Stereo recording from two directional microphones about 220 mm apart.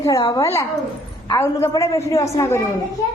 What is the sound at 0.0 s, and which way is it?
A woman's voice, 15° left (ahead or behind).